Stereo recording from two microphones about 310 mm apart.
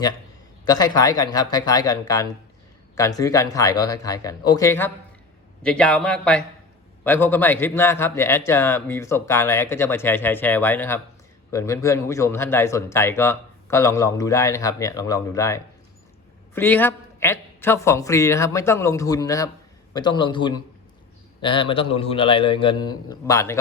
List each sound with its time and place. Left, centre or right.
0.6 s a man's voice: centre